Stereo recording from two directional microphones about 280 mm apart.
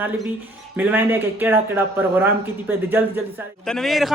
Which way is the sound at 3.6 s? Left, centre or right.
Centre.